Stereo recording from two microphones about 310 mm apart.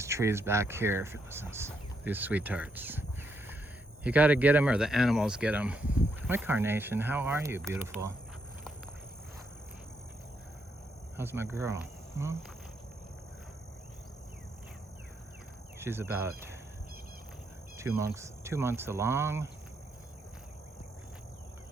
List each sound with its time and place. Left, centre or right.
0.0 s speech: centre
4.0 s speech: centre
11.2 s speech: centre
15.8 s speech: centre
17.7 s speech: centre